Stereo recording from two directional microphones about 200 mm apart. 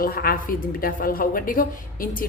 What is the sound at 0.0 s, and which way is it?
A woman's voice, 50° left (ahead or behind).